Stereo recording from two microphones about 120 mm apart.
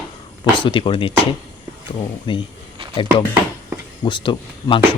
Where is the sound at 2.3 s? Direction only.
45° left (ahead or behind).